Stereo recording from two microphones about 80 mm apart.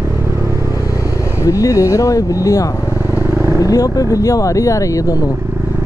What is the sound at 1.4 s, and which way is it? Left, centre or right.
Speech, left.